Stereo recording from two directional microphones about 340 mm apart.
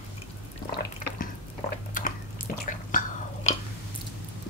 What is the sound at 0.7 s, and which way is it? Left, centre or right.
Water, left.